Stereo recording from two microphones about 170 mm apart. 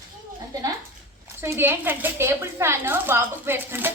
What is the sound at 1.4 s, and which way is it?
A woman's voice, 15° right (ahead or behind).